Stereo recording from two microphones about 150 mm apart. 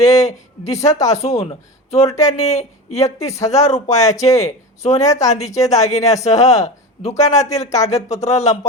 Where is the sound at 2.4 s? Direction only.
50° left (ahead or behind).